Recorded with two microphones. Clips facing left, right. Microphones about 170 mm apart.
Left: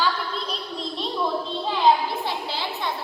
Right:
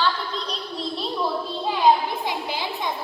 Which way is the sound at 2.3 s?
15° right (ahead or behind).